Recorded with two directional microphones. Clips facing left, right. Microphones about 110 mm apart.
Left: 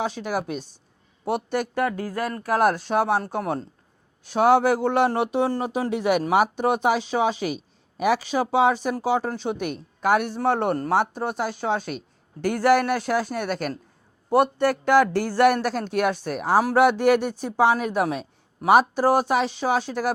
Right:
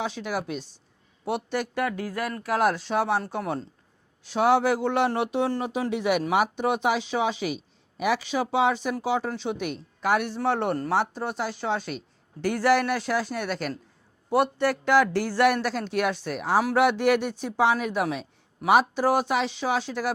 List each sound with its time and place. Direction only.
0.0 s speech: 45° left (ahead or behind)